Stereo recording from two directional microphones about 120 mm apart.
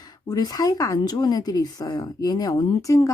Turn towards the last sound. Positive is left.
turn(degrees=25)  # may be behind; listen again after turning